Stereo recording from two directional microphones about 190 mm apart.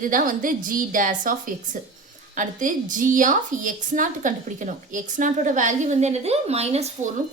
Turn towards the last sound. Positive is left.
turn(degrees=-35)  # may be behind; listen again after turning